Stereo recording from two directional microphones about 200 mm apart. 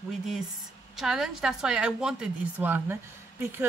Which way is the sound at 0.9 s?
Centre (ahead or behind).